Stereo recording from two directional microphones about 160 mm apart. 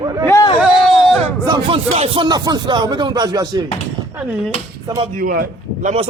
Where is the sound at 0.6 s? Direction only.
Centre (ahead or behind).